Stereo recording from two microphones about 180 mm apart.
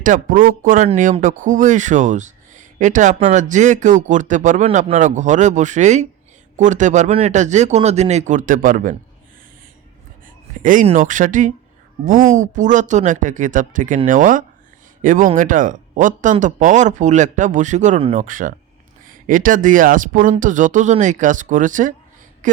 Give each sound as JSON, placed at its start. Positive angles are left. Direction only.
{"t": 0.0, "sound": "a man's voice", "side_deg": -50}
{"t": 10.6, "sound": "speech", "side_deg": -45}